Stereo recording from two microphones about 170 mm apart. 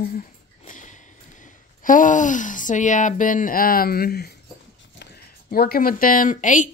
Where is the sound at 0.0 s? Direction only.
50° left (ahead or behind).